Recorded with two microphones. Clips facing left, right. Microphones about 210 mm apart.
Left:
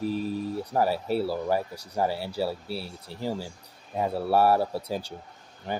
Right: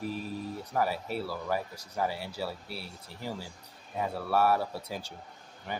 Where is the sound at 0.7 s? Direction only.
30° left (ahead or behind).